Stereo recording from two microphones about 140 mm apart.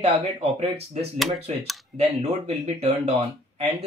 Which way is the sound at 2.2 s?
50° right (ahead or behind).